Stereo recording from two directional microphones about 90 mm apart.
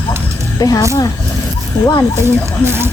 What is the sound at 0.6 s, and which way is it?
Speech, 45° left (ahead or behind).